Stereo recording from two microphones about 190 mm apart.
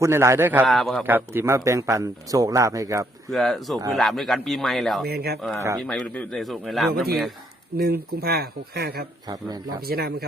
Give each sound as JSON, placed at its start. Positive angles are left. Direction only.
{"t": 0.0, "sound": "a man's voice", "side_deg": -15}
{"t": 0.7, "sound": "a man's voice", "side_deg": 0}
{"t": 1.0, "sound": "a man's voice", "side_deg": -10}
{"t": 3.2, "sound": "a man's voice", "side_deg": 0}
{"t": 5.0, "sound": "speech", "side_deg": -55}
{"t": 5.8, "sound": "a man's voice", "side_deg": 5}
{"t": 7.8, "sound": "speech", "side_deg": -55}
{"t": 9.2, "sound": "speech", "side_deg": -20}
{"t": 9.8, "sound": "speech", "side_deg": -55}